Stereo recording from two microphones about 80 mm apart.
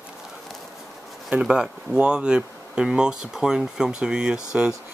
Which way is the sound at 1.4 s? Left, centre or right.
Centre.